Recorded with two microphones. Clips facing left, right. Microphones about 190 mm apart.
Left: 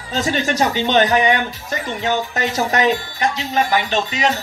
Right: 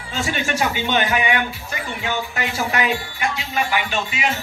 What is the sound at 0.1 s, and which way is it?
Speech, 40° left (ahead or behind).